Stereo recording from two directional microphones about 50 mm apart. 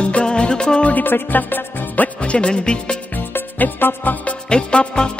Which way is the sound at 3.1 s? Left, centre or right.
Left.